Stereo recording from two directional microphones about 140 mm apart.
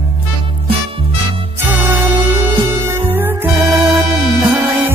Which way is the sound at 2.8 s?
15° right (ahead or behind).